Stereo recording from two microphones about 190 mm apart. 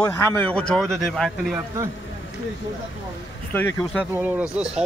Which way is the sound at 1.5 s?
15° right (ahead or behind).